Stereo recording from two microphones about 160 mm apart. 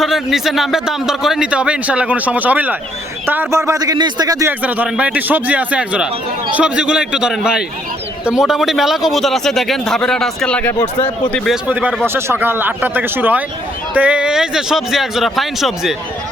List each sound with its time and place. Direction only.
0.0 s a man's voice: centre (ahead or behind); by 4.5 s 20° right (ahead or behind)
4.6 s a man's voice: 10° right (ahead or behind)
11.7 s a man's voice: 10° right (ahead or behind)